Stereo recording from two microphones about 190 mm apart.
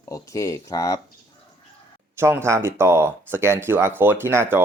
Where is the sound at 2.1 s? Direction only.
15° right (ahead or behind).